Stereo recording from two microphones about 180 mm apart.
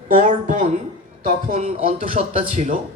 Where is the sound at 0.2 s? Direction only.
45° right (ahead or behind).